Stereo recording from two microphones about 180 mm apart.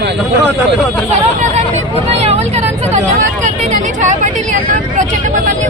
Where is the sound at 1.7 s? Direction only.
35° right (ahead or behind).